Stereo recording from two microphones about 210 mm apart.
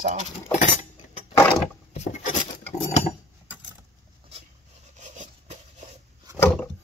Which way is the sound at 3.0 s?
5° right (ahead or behind).